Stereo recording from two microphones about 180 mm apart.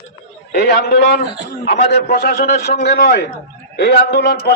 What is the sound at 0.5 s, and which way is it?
A man's voice, 65° left (ahead or behind).